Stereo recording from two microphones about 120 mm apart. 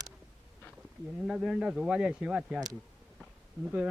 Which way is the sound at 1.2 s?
5° right (ahead or behind).